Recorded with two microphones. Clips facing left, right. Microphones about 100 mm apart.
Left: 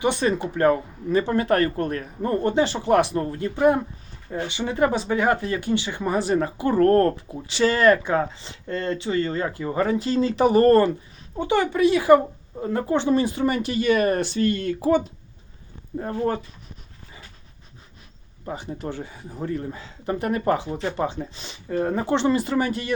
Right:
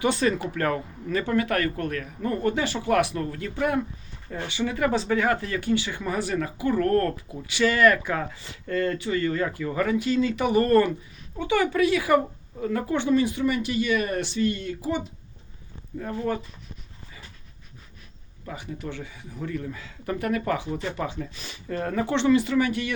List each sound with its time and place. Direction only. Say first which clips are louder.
0.0 s speech: left 1 dB; 20° left (ahead or behind); by 15.0 s 50° left (ahead or behind)
16.0 s speech: left 3 dB; 35° left (ahead or behind)
18.4 s speech: left 4 dB; 30° left (ahead or behind)